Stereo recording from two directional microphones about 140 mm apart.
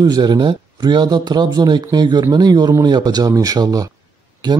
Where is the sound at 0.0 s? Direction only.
30° right (ahead or behind).